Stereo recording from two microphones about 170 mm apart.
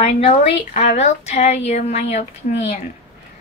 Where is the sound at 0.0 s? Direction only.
35° left (ahead or behind).